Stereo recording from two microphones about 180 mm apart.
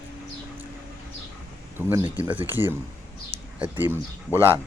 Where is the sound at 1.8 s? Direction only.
10° right (ahead or behind).